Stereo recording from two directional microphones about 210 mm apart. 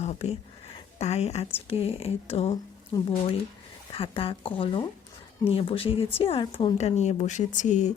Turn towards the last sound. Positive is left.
turn(degrees=35)  # may be behind; listen again after turning